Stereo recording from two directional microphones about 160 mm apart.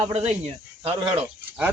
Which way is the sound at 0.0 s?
45° right (ahead or behind).